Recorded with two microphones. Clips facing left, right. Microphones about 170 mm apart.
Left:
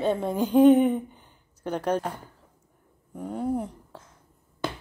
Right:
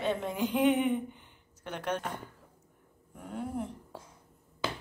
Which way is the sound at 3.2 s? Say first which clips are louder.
Left 8 dB; 40° left (ahead or behind).